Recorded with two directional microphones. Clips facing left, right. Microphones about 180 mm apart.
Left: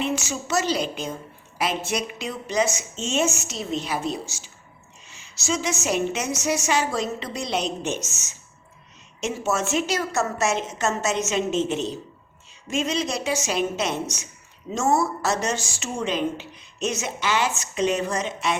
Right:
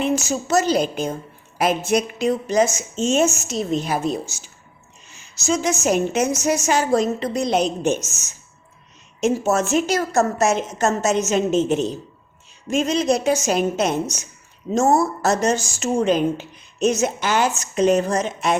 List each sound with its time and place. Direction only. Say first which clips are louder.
0.0 s a woman's voice: right 5 dB; 45° right (ahead or behind)
5.5 s a woman's voice: right 5 dB; 45° right (ahead or behind)
9.2 s a woman's voice: right 6 dB; 40° right (ahead or behind)